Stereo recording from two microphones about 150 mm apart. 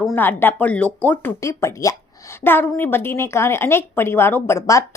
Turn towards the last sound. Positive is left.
turn(degrees=20)  # may be behind; listen again after turning